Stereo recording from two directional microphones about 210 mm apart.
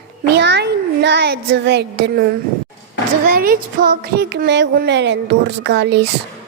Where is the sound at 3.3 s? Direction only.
45° right (ahead or behind).